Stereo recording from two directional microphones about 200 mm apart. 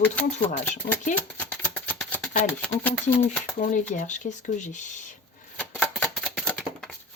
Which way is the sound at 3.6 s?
40° left (ahead or behind).